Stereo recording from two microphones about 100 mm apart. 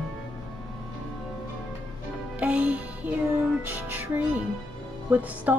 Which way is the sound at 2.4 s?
15° right (ahead or behind).